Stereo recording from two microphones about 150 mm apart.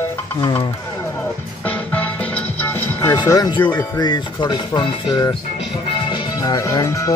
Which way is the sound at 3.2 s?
30° left (ahead or behind).